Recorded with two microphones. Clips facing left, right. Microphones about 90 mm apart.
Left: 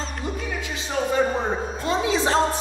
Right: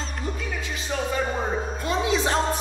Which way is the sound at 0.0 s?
Centre (ahead or behind).